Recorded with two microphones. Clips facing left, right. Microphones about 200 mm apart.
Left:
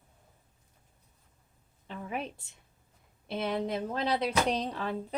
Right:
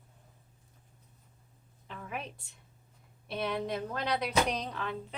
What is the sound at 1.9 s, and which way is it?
A woman's voice, 30° left (ahead or behind).